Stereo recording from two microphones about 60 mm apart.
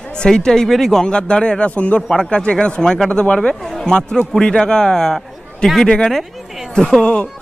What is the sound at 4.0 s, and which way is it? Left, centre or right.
Speech, centre.